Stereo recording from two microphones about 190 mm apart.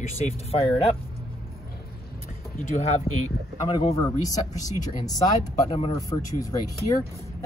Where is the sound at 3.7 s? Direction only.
20° left (ahead or behind).